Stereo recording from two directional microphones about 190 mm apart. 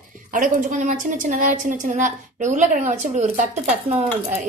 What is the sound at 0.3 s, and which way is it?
A woman's voice, 45° right (ahead or behind).